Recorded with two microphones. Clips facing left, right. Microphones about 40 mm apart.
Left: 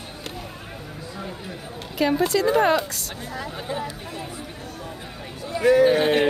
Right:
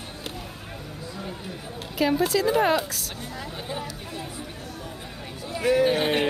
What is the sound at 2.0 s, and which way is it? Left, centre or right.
A woman's voice, centre.